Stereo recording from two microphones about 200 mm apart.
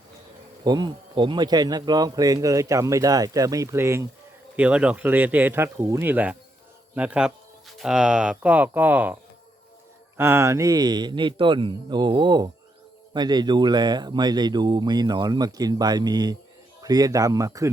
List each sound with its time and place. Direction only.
0.6 s speech: 20° right (ahead or behind)
10.2 s speech: 10° right (ahead or behind)